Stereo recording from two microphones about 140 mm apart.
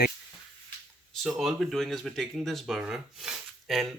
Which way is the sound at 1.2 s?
Centre (ahead or behind).